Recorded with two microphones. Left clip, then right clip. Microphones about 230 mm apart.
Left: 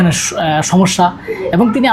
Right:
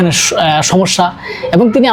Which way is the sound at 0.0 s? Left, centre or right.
Right.